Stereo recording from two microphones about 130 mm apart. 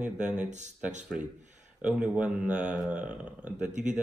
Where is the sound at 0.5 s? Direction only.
65° right (ahead or behind).